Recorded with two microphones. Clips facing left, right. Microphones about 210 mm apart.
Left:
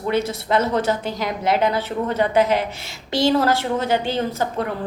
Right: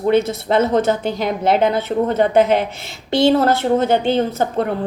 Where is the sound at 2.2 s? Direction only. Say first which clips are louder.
Right 3 dB; 55° right (ahead or behind).